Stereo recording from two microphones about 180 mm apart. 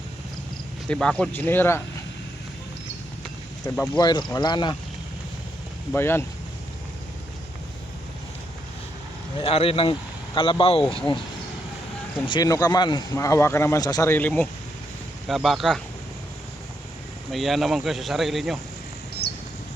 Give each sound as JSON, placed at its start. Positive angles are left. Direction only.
{"t": 0.9, "sound": "speech", "side_deg": 5}
{"t": 3.9, "sound": "a man's voice", "side_deg": 25}
{"t": 5.9, "sound": "speech", "side_deg": 15}
{"t": 9.4, "sound": "a man's voice", "side_deg": 30}
{"t": 12.2, "sound": "a man's voice", "side_deg": 25}
{"t": 15.3, "sound": "speech", "side_deg": 0}
{"t": 17.3, "sound": "speech", "side_deg": 0}